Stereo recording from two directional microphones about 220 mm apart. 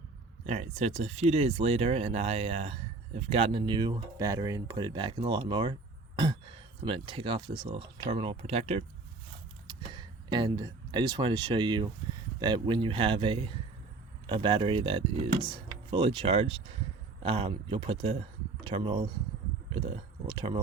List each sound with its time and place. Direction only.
0.4 s speech: 30° right (ahead or behind)
6.8 s speech: 25° right (ahead or behind)